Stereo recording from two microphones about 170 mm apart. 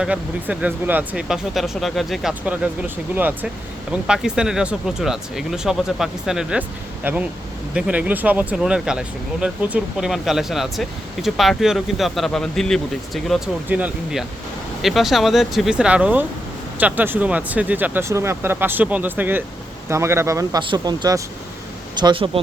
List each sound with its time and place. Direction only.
0.0 s speech: 5° right (ahead or behind); by 22.3 s 30° right (ahead or behind)